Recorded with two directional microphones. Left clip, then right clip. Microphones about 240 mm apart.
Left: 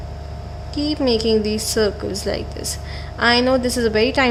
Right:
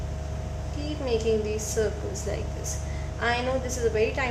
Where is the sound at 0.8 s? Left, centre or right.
Left.